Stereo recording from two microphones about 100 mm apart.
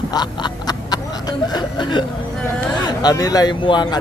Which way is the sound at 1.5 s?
50° left (ahead or behind).